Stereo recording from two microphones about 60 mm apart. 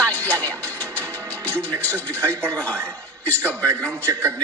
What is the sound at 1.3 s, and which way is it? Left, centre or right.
Music, left.